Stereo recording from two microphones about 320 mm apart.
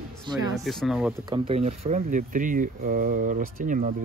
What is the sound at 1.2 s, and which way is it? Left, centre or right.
Speech, centre.